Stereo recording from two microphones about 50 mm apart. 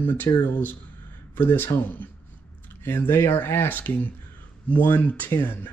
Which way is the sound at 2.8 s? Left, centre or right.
Left.